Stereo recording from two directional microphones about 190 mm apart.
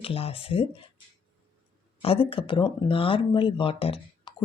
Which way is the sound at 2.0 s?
30° left (ahead or behind).